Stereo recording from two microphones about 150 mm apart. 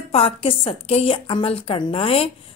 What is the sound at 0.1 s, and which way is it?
A woman's voice, 40° left (ahead or behind).